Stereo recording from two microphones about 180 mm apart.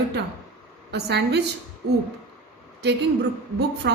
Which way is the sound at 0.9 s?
70° right (ahead or behind).